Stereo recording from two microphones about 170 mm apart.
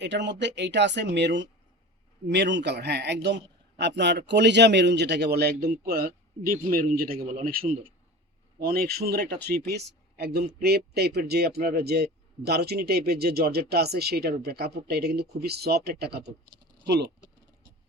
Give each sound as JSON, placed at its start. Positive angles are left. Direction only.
{"t": 0.0, "sound": "a man's voice", "side_deg": -90}